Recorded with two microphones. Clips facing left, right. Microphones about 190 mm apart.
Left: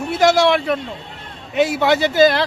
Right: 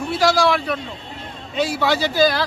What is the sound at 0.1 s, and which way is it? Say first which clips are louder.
A man's voice: left 3 dB; 20° left (ahead or behind).